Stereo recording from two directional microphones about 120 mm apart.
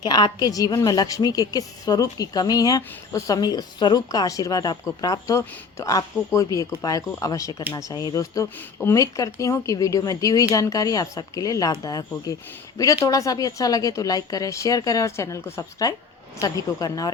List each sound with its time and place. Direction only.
0.0 s a woman's voice: 35° left (ahead or behind)